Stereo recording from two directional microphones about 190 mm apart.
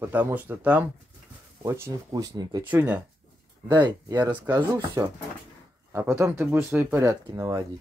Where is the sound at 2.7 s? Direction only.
10° right (ahead or behind).